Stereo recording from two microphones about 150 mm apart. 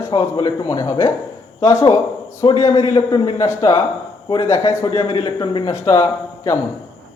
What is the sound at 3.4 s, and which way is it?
Speech, 20° left (ahead or behind).